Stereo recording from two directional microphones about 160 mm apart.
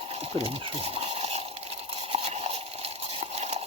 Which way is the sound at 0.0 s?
35° right (ahead or behind).